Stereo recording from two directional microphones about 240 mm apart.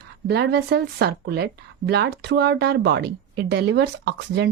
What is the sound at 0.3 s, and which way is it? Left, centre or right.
Speech, right.